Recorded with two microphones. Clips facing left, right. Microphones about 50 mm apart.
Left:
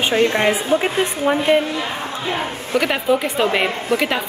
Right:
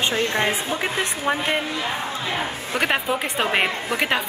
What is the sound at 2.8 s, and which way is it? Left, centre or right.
A woman's voice, centre.